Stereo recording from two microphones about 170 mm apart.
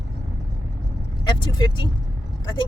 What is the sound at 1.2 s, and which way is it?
Speech, 25° left (ahead or behind).